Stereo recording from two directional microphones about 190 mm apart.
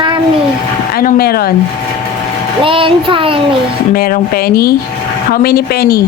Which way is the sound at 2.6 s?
30° right (ahead or behind).